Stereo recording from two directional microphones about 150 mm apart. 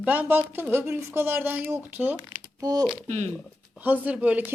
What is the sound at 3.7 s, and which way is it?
Speech, 10° right (ahead or behind).